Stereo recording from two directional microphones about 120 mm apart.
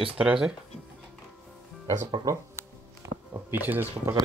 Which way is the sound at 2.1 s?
30° right (ahead or behind).